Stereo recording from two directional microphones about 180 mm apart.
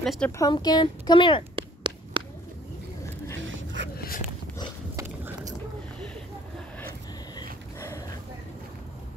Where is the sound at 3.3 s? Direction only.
90° right.